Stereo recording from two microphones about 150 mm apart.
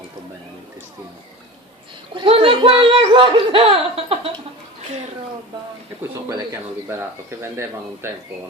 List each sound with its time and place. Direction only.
2.1 s speech: 35° right (ahead or behind)
6.0 s speech: 20° right (ahead or behind)